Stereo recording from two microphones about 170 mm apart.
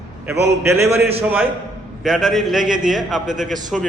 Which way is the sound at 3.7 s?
Centre (ahead or behind).